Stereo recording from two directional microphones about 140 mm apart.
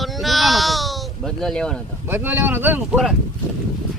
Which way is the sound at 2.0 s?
15° right (ahead or behind).